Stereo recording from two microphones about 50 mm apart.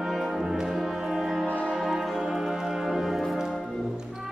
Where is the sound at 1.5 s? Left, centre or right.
Left.